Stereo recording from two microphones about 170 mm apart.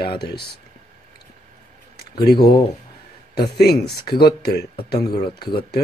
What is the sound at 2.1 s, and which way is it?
Speech, 70° left (ahead or behind).